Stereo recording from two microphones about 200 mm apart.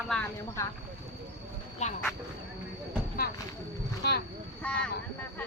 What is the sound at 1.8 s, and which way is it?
Speech, 35° left (ahead or behind).